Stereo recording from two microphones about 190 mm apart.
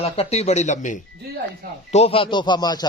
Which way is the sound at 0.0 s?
35° left (ahead or behind).